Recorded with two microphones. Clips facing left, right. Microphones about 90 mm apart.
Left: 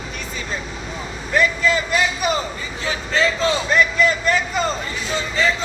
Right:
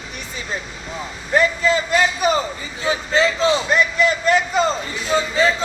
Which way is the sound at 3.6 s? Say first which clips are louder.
Even; 20° right (ahead or behind).